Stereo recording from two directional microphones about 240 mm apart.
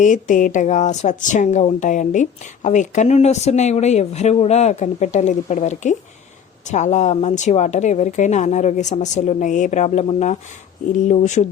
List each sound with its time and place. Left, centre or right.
0.0 s speech: left